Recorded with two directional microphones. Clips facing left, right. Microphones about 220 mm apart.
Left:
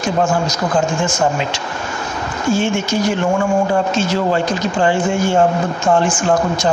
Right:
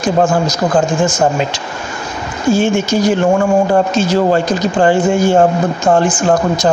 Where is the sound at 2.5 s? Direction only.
40° right (ahead or behind).